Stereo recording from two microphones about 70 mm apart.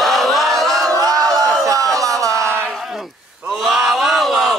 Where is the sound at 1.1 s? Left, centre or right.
Right.